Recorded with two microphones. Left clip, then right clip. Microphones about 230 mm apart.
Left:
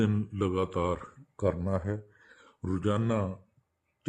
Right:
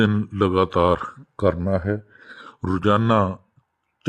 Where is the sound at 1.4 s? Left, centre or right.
Right.